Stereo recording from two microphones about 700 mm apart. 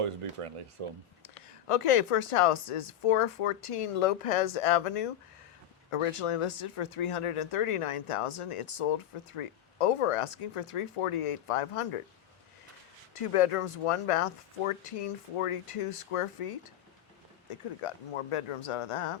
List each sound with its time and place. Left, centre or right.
0.0 s speech: right
1.2 s speech: left
13.1 s speech: left